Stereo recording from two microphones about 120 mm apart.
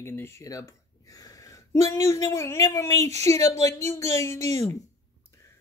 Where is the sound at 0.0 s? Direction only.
20° left (ahead or behind).